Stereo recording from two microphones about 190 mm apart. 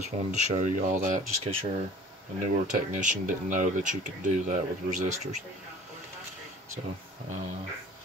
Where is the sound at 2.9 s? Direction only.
40° right (ahead or behind).